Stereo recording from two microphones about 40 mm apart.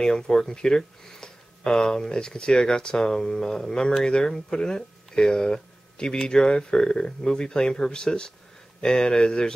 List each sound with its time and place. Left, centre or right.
0.0 s speech: centre